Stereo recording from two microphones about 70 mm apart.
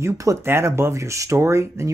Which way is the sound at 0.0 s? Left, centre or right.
Right.